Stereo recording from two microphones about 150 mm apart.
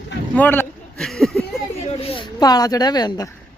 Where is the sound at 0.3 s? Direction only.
10° left (ahead or behind).